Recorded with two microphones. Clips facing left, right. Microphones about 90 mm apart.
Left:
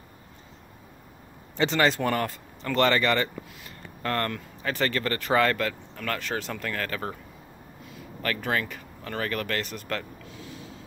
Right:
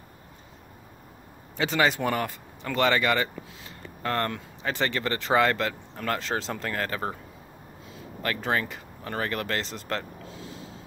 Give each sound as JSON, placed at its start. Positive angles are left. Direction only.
{"t": 1.6, "sound": "speech", "side_deg": -10}